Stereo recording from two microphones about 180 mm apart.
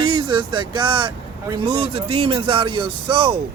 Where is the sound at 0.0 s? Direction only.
25° right (ahead or behind).